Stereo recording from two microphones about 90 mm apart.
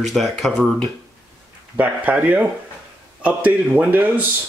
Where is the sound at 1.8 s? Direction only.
15° right (ahead or behind).